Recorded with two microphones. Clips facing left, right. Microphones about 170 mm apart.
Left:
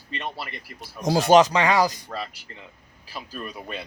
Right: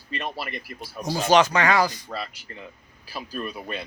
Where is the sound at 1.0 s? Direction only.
90° left.